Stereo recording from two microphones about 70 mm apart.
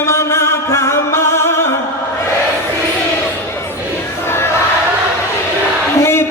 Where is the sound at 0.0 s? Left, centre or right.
Left.